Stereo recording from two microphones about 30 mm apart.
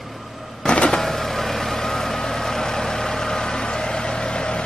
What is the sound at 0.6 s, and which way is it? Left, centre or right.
Vehicle, left.